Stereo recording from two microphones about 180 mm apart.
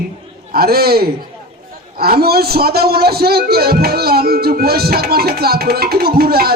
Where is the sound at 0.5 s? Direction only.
55° right (ahead or behind).